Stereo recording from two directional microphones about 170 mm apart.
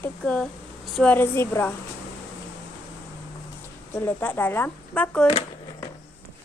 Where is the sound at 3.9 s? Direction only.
10° left (ahead or behind).